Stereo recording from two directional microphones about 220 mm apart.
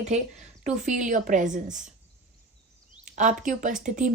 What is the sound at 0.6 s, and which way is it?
Speech, 35° right (ahead or behind).